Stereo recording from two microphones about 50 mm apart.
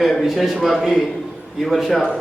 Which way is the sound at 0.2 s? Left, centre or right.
Centre.